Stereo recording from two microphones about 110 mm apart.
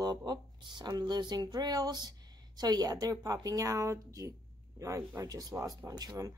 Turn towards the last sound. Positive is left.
turn(degrees=-35)  # may be behind; listen again after turning